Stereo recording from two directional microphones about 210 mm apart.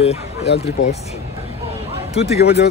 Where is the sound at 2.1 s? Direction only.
30° left (ahead or behind).